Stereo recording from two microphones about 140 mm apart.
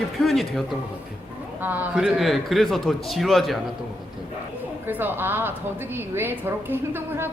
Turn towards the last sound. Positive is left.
turn(degrees=-15)  # may be behind; listen again after turning